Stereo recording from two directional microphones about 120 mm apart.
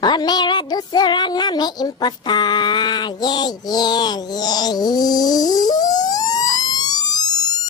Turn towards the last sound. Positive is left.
turn(degrees=35)  # may be behind; listen again after turning